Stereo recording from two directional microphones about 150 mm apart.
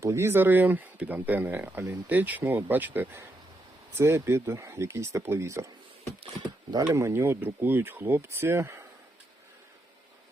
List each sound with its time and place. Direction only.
0.0 s speech: 20° right (ahead or behind)
6.8 s speech: 15° right (ahead or behind)